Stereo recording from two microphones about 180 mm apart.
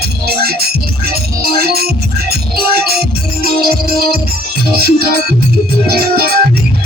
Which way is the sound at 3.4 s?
60° right (ahead or behind).